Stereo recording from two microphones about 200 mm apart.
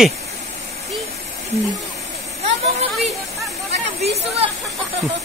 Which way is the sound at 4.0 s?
30° right (ahead or behind).